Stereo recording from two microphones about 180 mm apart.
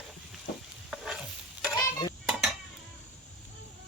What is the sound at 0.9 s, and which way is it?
Stir, 5° right (ahead or behind).